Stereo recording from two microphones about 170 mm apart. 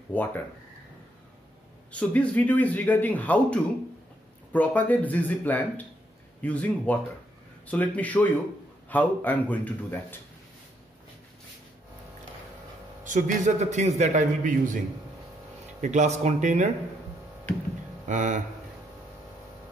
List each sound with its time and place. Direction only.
0.1 s a man's voice: 10° left (ahead or behind)
1.9 s a man's voice: 10° left (ahead or behind)
13.0 s a man's voice: 45° right (ahead or behind)
15.8 s a man's voice: 45° right (ahead or behind)
18.0 s speech: 45° right (ahead or behind)